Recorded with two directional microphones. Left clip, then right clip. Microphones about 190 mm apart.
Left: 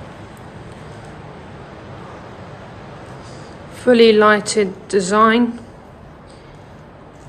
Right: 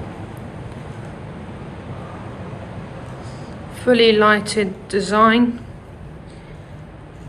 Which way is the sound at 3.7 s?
30° left (ahead or behind).